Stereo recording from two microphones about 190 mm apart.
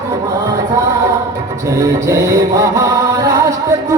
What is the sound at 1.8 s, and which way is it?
Chant, 15° right (ahead or behind).